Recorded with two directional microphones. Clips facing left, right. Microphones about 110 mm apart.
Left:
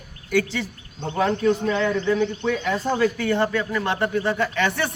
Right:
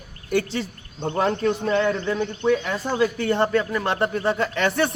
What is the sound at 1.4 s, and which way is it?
Speech, 40° right (ahead or behind).